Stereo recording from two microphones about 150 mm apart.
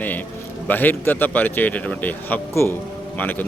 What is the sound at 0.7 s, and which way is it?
A man's voice, 10° left (ahead or behind).